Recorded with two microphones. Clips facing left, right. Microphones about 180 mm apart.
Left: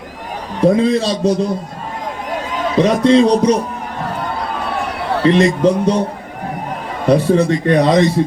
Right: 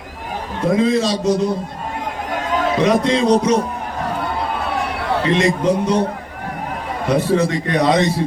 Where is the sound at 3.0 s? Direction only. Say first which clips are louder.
Left 5 dB; 35° left (ahead or behind).